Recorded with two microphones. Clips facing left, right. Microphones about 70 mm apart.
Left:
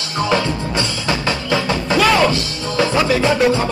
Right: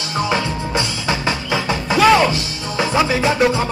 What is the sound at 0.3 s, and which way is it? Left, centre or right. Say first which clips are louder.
Music: left 4 dB; centre.